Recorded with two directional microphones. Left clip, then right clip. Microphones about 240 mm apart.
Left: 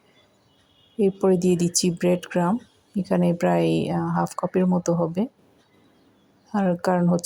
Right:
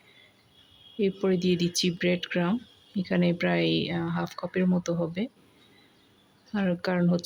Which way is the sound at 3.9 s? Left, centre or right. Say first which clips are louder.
Left 7 dB; centre.